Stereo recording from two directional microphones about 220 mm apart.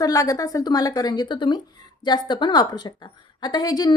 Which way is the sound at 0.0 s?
15° left (ahead or behind).